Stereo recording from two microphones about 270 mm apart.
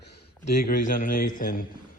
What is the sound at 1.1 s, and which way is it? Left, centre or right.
Speech, left.